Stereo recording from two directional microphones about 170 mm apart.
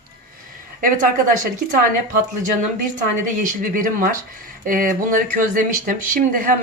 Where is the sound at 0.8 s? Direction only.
50° right (ahead or behind).